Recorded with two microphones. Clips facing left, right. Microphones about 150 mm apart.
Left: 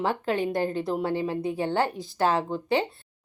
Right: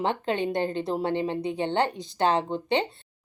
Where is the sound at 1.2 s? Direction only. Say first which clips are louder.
Even; 25° right (ahead or behind).